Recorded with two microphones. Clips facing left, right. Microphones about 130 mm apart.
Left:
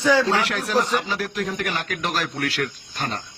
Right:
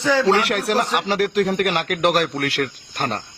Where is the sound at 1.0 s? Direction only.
85° right.